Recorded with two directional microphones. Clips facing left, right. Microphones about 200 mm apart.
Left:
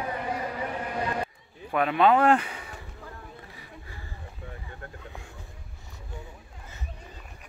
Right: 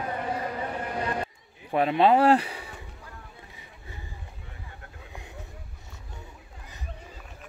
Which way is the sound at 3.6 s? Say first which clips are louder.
Left 1 dB; 20° right (ahead or behind).